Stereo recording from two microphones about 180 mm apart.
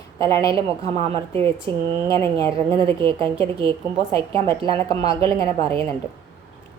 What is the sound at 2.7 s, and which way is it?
A woman's voice, 30° right (ahead or behind).